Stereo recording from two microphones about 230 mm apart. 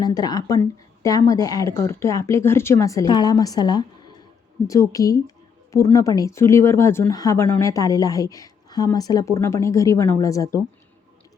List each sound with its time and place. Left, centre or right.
0.0 s speech: centre